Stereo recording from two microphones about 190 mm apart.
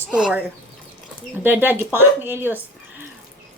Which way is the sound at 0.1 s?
5° right (ahead or behind).